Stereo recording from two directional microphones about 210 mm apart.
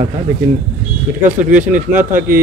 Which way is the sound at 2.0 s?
40° right (ahead or behind).